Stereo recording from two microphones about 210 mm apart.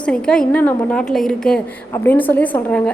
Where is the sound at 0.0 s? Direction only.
5° left (ahead or behind).